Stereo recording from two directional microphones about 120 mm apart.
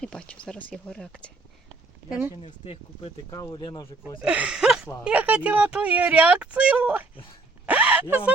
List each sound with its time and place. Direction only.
0.0 s speech: 5° left (ahead or behind)
2.4 s speech: 60° left (ahead or behind)
3.2 s speech: 30° left (ahead or behind)
4.2 s speech: 10° right (ahead or behind)
7.7 s a sound: 10° right (ahead or behind)